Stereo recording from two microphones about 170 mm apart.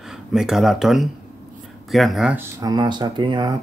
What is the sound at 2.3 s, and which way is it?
Speech, 25° right (ahead or behind).